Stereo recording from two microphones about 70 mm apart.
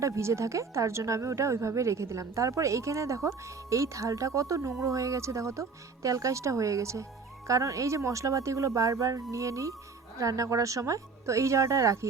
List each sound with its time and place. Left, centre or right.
0.0 s speech: right